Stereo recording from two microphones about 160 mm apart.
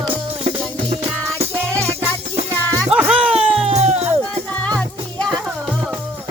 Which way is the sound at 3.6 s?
45° right (ahead or behind).